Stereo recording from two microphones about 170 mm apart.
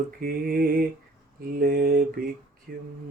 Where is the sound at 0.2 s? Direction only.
60° right (ahead or behind).